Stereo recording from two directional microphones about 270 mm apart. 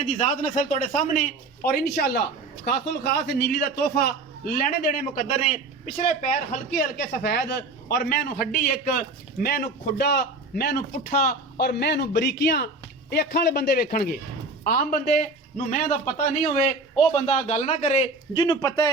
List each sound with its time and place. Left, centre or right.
0.3 s a man's voice: left